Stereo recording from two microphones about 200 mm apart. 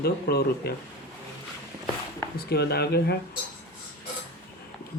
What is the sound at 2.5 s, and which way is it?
Speech, 55° left (ahead or behind).